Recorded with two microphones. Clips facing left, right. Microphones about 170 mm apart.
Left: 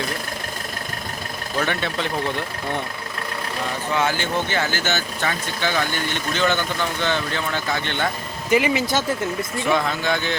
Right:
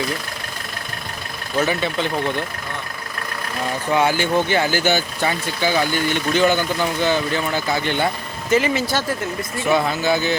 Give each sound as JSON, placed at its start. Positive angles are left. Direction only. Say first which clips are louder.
{"t": 1.5, "sound": "speech", "louder": "right 4 dB", "side_deg": -5}
{"t": 3.9, "sound": "speech", "louder": "right 5 dB", "side_deg": -15}
{"t": 8.4, "sound": "speech", "louder": "right 1 dB", "side_deg": 15}
{"t": 9.6, "sound": "speech", "louder": "right 4 dB", "side_deg": -5}